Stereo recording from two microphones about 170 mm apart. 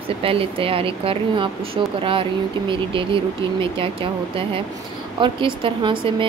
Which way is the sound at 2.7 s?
30° right (ahead or behind).